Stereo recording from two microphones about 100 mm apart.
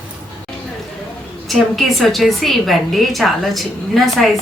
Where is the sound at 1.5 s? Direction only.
Centre (ahead or behind).